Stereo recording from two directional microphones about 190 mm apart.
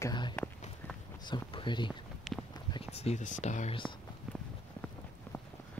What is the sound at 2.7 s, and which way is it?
Speech, 30° left (ahead or behind).